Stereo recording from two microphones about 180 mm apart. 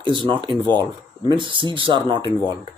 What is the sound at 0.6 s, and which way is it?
Speech, 10° left (ahead or behind).